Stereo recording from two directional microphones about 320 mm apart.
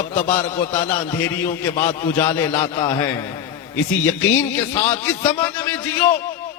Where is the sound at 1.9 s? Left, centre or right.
Centre.